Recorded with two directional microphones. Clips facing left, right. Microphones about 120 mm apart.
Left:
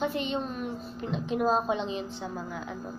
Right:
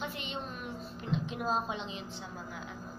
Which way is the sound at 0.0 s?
35° left (ahead or behind).